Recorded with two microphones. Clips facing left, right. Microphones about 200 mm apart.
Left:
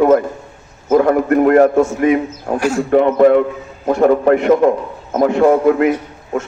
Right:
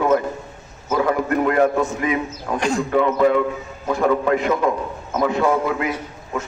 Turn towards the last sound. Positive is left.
turn(degrees=55)  # may be behind; listen again after turning